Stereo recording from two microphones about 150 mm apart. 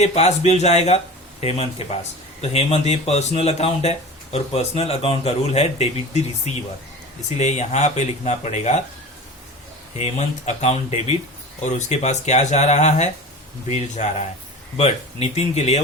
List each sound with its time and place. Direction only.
0.0 s speech: 45° left (ahead or behind)
10.0 s speech: 50° left (ahead or behind)